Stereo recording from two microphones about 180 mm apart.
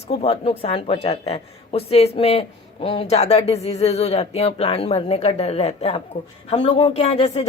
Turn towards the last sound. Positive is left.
turn(degrees=35)  # may be behind; listen again after turning